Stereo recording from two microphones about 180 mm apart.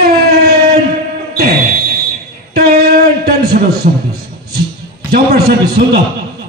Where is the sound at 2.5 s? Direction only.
55° right (ahead or behind).